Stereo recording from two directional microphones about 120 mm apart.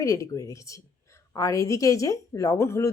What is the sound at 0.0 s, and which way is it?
Speech, 25° left (ahead or behind).